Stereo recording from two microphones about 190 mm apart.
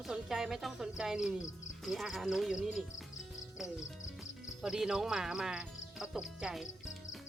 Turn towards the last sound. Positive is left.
turn(degrees=-5)  # may be behind; listen again after turning